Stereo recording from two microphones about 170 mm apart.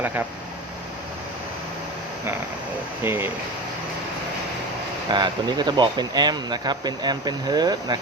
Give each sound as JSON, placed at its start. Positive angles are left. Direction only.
{"t": 0.0, "sound": "speech", "side_deg": -10}
{"t": 3.0, "sound": "speech", "side_deg": -10}
{"t": 5.1, "sound": "speech", "side_deg": -25}